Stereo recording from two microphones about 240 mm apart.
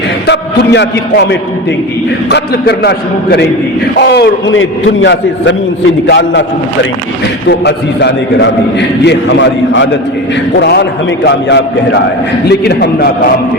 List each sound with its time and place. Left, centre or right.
0.3 s a man's voice: left
7.4 s a man's voice: left